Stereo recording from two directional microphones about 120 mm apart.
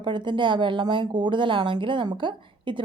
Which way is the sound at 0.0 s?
40° right (ahead or behind).